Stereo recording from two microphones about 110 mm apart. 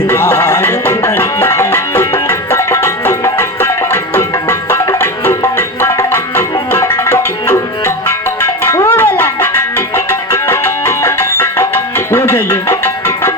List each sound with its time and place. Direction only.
0.1 s music: 25° left (ahead or behind)